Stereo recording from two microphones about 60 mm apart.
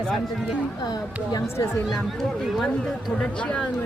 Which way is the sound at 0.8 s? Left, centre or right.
Left.